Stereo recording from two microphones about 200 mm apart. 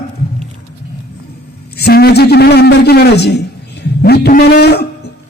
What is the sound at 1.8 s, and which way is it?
A man's voice, 55° left (ahead or behind).